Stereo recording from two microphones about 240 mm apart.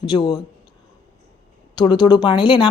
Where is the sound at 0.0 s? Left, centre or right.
Centre.